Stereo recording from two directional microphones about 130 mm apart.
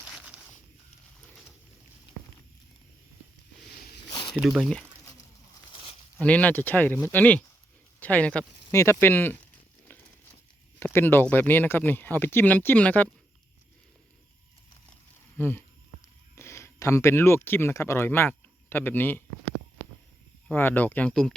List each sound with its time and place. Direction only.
0.0 s a sound: 10° right (ahead or behind)
4.1 s a sound: 35° left (ahead or behind)
4.4 s speech: centre (ahead or behind)
5.7 s a sound: 50° left (ahead or behind)
6.1 s speech: 10° left (ahead or behind)
8.7 s speech: 20° left (ahead or behind)
10.8 s speech: 15° left (ahead or behind)
15.4 s speech: 15° left (ahead or behind)
20.5 s speech: 15° left (ahead or behind)